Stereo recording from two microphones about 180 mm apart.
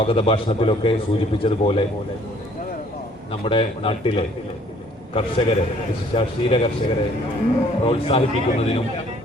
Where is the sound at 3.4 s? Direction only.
30° left (ahead or behind).